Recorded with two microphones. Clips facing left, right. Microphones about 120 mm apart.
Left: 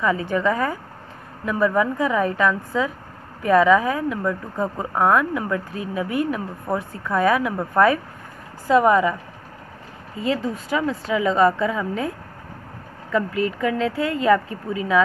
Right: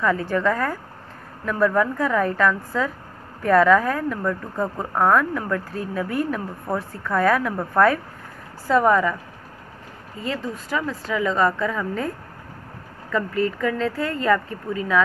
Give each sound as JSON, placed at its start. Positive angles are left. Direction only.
{"t": 0.0, "sound": "speech", "side_deg": 10}
{"t": 8.6, "sound": "speech", "side_deg": 10}
{"t": 10.2, "sound": "speech", "side_deg": 25}
{"t": 13.1, "sound": "speech", "side_deg": 15}